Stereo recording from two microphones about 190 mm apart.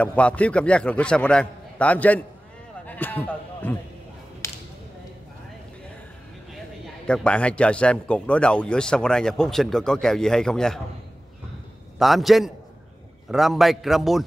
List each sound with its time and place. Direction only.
0.0 s a man's voice: 5° left (ahead or behind)
2.9 s a sound: 10° left (ahead or behind)
4.4 s whip: 15° left (ahead or behind)
7.1 s speech: 5° left (ahead or behind)
12.0 s speech: centre (ahead or behind)